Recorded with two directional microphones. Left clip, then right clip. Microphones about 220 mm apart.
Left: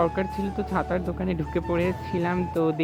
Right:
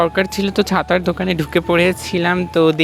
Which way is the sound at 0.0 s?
35° right (ahead or behind).